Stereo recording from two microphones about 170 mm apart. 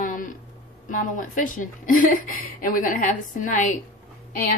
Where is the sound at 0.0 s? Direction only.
50° left (ahead or behind).